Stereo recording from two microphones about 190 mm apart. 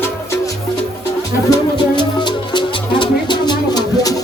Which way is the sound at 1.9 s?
25° left (ahead or behind).